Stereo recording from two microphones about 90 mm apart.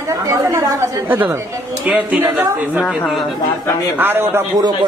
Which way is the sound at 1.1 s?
20° right (ahead or behind).